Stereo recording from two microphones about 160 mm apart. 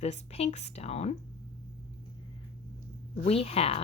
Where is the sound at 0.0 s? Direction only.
40° left (ahead or behind).